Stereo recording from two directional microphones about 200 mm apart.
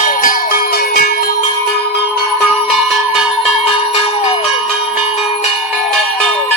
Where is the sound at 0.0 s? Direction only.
45° left (ahead or behind).